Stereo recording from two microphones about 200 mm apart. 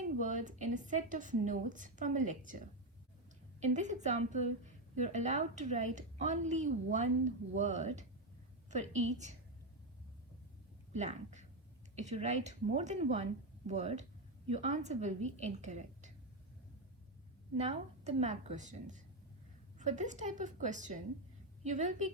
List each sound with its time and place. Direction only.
0.2 s a woman's voice: 40° right (ahead or behind)
3.6 s a woman's voice: 35° right (ahead or behind)
10.9 s a woman's voice: 35° right (ahead or behind)
17.6 s a woman's voice: 35° right (ahead or behind)